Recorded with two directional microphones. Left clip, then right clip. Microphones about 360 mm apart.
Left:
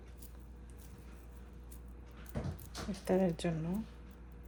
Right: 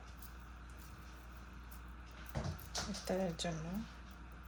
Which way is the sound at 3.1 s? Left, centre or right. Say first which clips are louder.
Left 7 dB; centre.